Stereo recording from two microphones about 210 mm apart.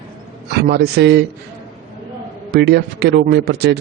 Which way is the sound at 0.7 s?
50° right (ahead or behind).